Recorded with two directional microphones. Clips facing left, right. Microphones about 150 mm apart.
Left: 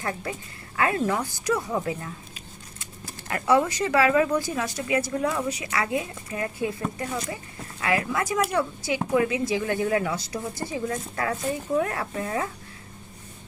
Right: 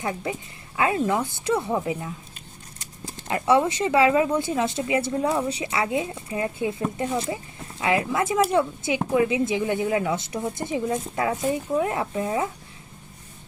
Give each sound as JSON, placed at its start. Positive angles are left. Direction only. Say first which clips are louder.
{"t": 0.0, "sound": "speech", "louder": "right 3 dB", "side_deg": -20}
{"t": 1.7, "sound": "speech", "louder": "right 2 dB", "side_deg": -15}